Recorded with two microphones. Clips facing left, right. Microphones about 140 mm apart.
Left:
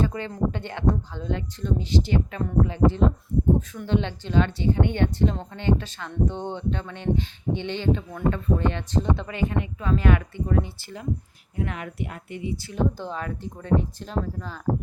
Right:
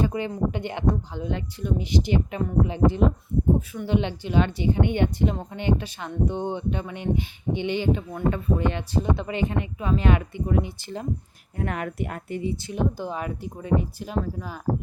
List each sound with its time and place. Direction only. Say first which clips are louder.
0.0 s a sound: right 1 dB; 15° right (ahead or behind)
0.5 s speech: even; 15° right (ahead or behind)
11.5 s speech: right 2 dB; 50° right (ahead or behind)
12.6 s speech: even; 15° right (ahead or behind)